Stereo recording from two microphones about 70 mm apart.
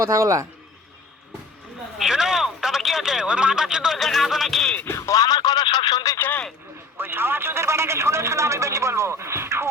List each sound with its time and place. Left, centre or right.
0.0 s a man's voice: right
2.0 s telephone: centre
3.9 s music: centre
4.9 s a sound: left
5.1 s radio: left
6.1 s a sound: left
6.9 s speech: right